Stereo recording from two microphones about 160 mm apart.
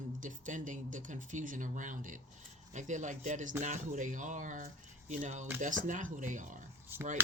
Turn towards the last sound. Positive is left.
turn(degrees=-15)  # may be behind; listen again after turning